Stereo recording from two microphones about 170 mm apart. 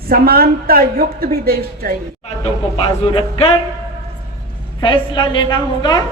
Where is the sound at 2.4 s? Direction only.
30° left (ahead or behind).